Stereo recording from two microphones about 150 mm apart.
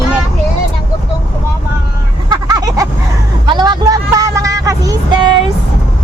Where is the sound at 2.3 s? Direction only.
25° right (ahead or behind).